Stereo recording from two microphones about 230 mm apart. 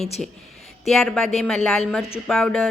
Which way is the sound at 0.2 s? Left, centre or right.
Centre.